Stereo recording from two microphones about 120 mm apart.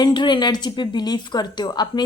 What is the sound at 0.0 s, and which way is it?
A woman's voice, 40° left (ahead or behind).